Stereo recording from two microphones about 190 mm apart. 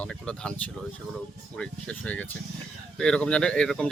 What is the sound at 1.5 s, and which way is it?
Speech, 5° left (ahead or behind).